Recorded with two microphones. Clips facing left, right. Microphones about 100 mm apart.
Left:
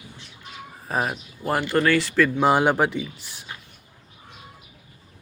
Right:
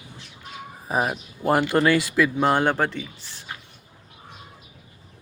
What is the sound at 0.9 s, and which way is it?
Speech, 10° right (ahead or behind).